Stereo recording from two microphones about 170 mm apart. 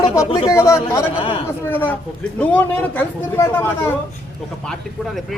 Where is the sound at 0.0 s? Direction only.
20° left (ahead or behind).